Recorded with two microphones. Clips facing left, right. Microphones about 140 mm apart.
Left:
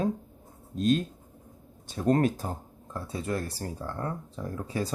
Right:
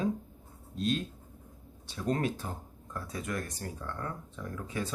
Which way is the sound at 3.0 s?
30° left (ahead or behind).